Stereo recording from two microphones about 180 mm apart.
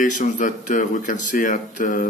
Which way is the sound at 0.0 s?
45° left (ahead or behind).